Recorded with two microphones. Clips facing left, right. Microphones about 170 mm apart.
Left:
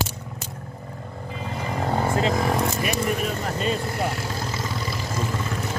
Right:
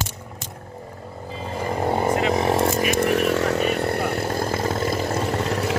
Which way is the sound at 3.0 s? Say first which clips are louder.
Right 6 dB; 75° right (ahead or behind).